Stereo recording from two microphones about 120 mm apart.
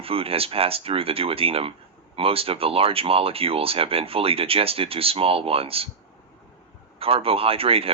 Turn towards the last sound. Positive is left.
turn(degrees=-55)  # may be behind; listen again after turning